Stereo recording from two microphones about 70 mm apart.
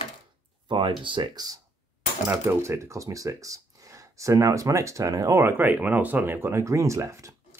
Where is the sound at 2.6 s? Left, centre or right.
Right.